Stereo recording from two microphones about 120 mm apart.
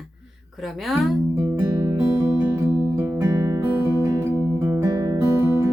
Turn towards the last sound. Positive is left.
turn(degrees=-25)  # may be behind; listen again after turning